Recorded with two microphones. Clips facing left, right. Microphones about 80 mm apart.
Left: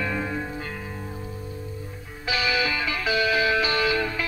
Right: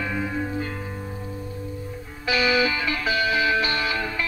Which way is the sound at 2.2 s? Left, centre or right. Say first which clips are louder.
Right 4 dB; right.